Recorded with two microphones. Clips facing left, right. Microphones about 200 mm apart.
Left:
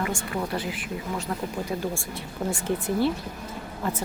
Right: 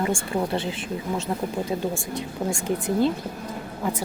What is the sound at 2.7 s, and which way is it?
Speech, 15° right (ahead or behind).